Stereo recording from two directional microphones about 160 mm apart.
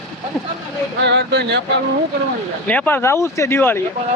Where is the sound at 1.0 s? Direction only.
90° right.